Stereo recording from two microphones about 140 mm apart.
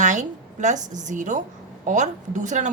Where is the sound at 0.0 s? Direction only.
60° right (ahead or behind).